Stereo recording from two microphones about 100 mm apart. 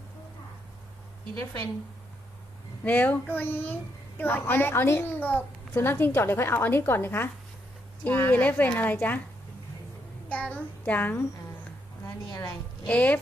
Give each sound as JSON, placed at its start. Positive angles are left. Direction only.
{"t": 2.8, "sound": "a child's voice", "side_deg": 15}
{"t": 10.2, "sound": "a child's voice", "side_deg": 15}
{"t": 12.0, "sound": "a woman's voice", "side_deg": 30}
{"t": 12.8, "sound": "a child's voice", "side_deg": 15}